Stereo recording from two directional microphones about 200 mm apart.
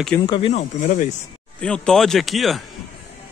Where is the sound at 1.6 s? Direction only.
5° left (ahead or behind).